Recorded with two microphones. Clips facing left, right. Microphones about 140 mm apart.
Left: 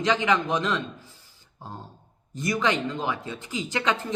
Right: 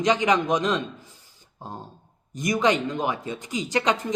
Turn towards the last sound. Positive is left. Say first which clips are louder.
# right 3 dB
turn(degrees=-15)  # may be behind; listen again after turning